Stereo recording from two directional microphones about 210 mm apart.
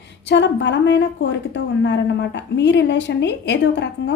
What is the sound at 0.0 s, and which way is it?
A woman's voice, 55° left (ahead or behind).